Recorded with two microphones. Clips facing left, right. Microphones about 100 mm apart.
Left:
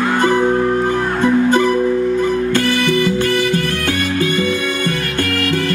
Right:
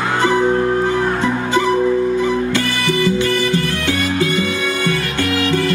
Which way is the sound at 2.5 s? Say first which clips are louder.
Left 3 dB; 50° left (ahead or behind).